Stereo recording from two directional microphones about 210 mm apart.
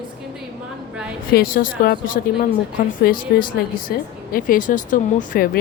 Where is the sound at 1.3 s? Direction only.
40° left (ahead or behind).